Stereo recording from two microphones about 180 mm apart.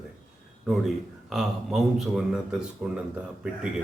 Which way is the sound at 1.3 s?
Centre (ahead or behind).